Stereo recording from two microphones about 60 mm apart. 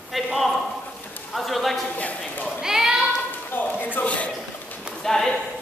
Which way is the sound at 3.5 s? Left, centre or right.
Left.